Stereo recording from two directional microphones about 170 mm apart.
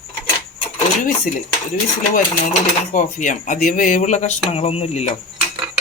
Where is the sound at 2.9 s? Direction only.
50° left (ahead or behind).